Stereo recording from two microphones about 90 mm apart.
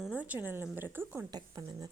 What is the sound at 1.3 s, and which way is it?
Speech, 50° right (ahead or behind).